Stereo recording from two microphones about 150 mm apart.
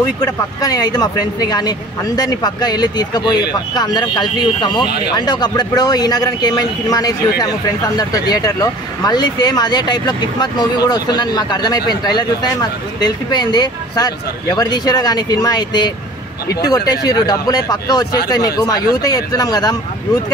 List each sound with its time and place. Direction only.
0.2 s speech: 25° left (ahead or behind)